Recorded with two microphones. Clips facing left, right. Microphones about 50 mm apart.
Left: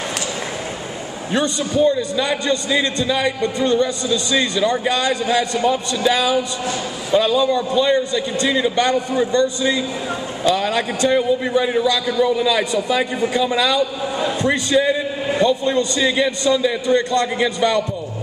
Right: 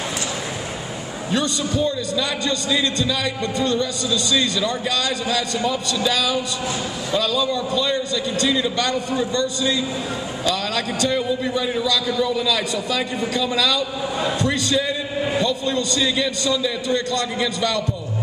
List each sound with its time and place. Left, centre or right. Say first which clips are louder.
1.3 s a man's voice: left 3 dB; left